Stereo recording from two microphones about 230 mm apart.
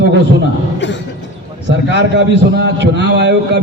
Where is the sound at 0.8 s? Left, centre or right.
Left.